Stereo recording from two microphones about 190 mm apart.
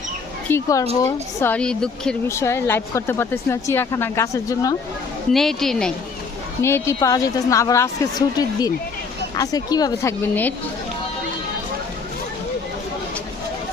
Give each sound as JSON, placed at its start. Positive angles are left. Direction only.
{"t": 0.4, "sound": "a woman's voice", "side_deg": 15}
{"t": 5.3, "sound": "a woman's voice", "side_deg": 0}
{"t": 6.6, "sound": "a woman's voice", "side_deg": 15}
{"t": 9.4, "sound": "speech", "side_deg": 20}